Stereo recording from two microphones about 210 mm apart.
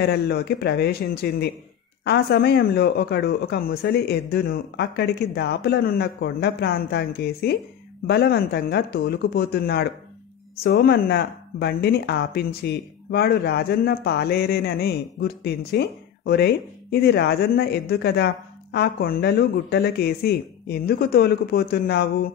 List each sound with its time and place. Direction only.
0.0 s speech: 50° left (ahead or behind)